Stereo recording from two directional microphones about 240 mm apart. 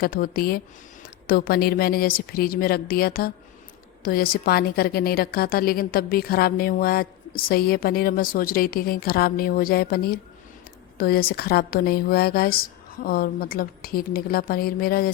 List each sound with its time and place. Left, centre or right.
0.0 s a woman's voice: left